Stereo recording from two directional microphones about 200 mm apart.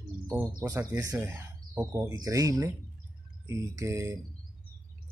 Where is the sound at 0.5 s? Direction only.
20° right (ahead or behind).